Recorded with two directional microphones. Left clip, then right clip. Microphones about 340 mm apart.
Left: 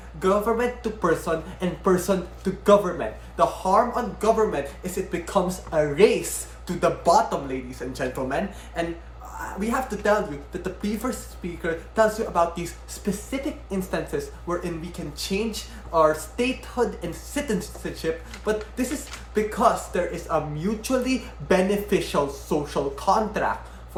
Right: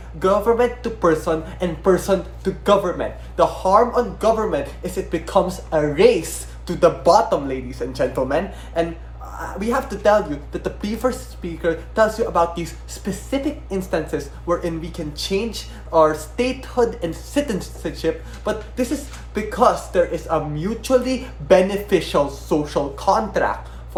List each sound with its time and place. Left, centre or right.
0.2 s speech: centre
15.9 s speech: centre